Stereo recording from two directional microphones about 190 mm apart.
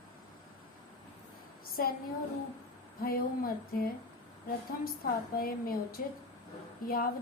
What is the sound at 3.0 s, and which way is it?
Speech, 50° left (ahead or behind).